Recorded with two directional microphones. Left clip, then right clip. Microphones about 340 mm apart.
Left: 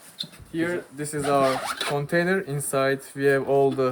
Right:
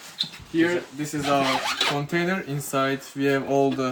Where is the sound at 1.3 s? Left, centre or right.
Centre.